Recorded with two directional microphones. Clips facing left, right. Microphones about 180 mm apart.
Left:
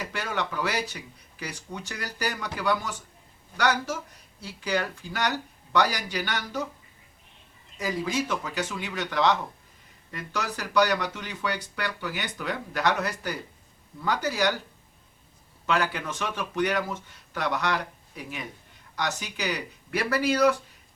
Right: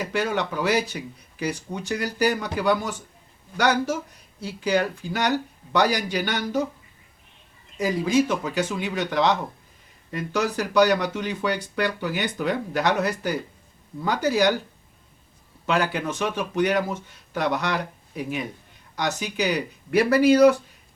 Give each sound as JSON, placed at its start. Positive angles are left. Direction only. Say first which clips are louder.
{"t": 0.0, "sound": "speech", "louder": "right 6 dB", "side_deg": -15}
{"t": 4.4, "sound": "speech", "louder": "right 6 dB", "side_deg": -15}
{"t": 7.8, "sound": "speech", "louder": "right 7 dB", "side_deg": -20}
{"t": 15.6, "sound": "speech", "louder": "right 3 dB", "side_deg": -20}
{"t": 18.9, "sound": "speech", "louder": "right 5 dB", "side_deg": -15}